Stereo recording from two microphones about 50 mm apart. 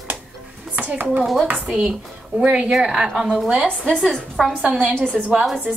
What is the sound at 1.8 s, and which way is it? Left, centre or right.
Speech, centre.